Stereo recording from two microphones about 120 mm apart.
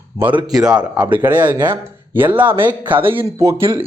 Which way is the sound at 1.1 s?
15° right (ahead or behind).